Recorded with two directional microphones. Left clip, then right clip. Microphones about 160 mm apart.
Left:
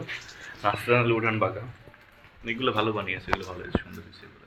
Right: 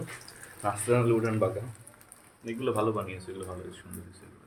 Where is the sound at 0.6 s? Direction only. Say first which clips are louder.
Left 4 dB; 10° right (ahead or behind).